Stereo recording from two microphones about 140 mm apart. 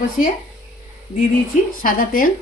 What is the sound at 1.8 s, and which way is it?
Speech, 85° left.